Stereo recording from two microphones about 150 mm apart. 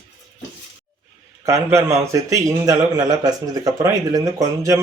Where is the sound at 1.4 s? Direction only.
20° right (ahead or behind).